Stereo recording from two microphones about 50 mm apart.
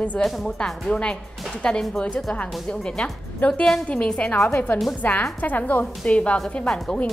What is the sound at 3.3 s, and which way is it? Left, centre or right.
A woman's voice, left.